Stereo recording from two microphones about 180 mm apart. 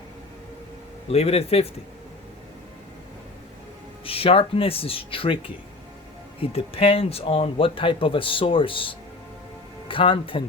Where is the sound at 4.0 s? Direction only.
30° left (ahead or behind).